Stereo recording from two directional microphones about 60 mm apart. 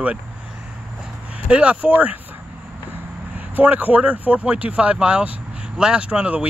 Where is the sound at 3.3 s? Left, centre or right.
Right.